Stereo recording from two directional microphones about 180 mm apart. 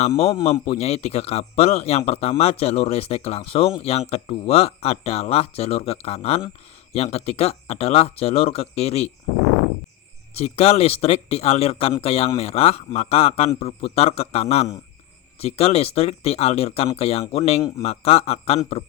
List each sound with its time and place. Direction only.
0.6 s speech: 35° left (ahead or behind)
10.3 s speech: 35° left (ahead or behind)